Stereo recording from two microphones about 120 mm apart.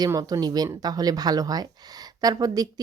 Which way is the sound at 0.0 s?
30° right (ahead or behind).